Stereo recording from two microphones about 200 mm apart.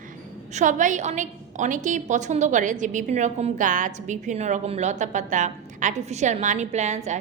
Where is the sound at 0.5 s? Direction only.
40° right (ahead or behind).